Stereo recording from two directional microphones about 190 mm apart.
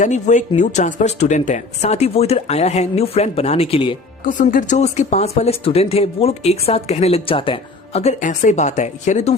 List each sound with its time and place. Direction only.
0.0 s speech: 40° left (ahead or behind)
4.3 s speech: 45° left (ahead or behind)